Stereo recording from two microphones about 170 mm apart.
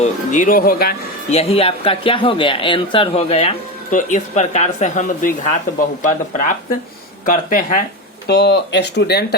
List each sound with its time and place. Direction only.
0.0 s speech: 50° left (ahead or behind)
1.3 s speech: 35° left (ahead or behind); by 7.9 s 50° left (ahead or behind)
8.3 s speech: 75° left (ahead or behind)